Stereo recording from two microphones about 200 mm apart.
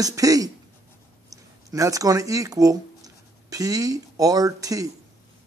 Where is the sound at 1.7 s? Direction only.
15° right (ahead or behind).